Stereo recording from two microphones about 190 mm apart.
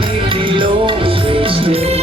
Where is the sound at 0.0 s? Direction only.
25° right (ahead or behind).